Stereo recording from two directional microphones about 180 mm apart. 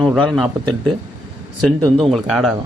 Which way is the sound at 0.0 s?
Centre (ahead or behind).